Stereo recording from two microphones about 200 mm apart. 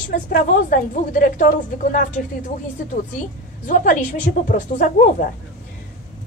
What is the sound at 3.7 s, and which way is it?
Speech, 40° left (ahead or behind).